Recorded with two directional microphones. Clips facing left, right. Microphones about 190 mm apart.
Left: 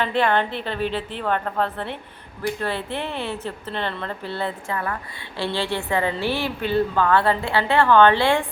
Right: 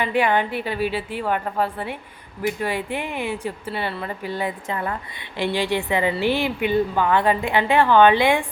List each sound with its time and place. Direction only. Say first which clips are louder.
0.0 s a woman's voice: even; 10° right (ahead or behind)